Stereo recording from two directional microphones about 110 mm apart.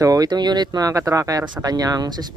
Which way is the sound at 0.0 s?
35° right (ahead or behind).